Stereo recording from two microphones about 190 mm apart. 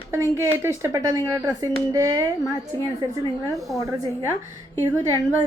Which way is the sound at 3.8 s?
15° right (ahead or behind).